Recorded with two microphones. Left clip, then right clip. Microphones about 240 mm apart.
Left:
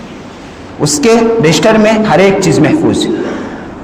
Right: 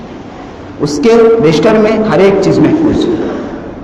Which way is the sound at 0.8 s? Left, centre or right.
Left.